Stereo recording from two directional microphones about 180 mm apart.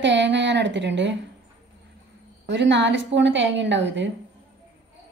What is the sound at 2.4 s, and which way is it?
A woman's voice, 80° right.